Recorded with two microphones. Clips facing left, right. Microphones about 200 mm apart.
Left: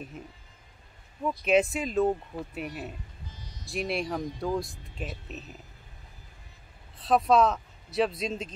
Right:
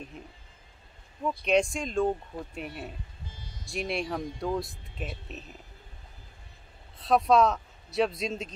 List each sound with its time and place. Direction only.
0.2 s speech: 5° left (ahead or behind)
1.4 s speech: 5° left (ahead or behind)
3.3 s music: 30° right (ahead or behind)
3.6 s speech: centre (ahead or behind)
7.0 s speech: centre (ahead or behind)